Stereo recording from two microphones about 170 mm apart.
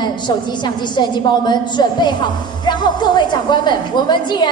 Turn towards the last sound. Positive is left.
turn(degrees=25)  # may be behind; listen again after turning